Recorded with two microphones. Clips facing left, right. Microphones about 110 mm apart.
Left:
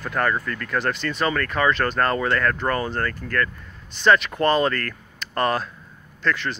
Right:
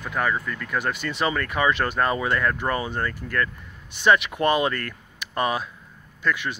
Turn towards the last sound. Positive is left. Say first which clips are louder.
# left 1 dB
turn(degrees=-10)  # may be behind; listen again after turning